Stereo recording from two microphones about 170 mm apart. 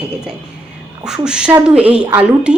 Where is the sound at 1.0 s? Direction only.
5° right (ahead or behind).